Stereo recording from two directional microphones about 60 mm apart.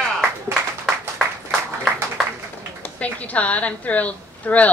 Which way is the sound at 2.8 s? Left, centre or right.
Left.